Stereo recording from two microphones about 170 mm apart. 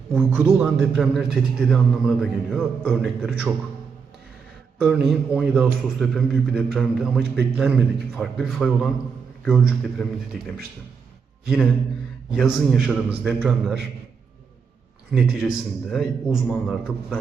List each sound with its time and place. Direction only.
0.1 s a man's voice: 15° right (ahead or behind); by 3.3 s 5° left (ahead or behind)
4.8 s a man's voice: 5° right (ahead or behind)
15.1 s a man's voice: centre (ahead or behind)